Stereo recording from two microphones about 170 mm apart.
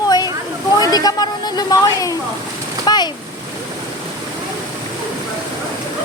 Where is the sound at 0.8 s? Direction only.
25° left (ahead or behind).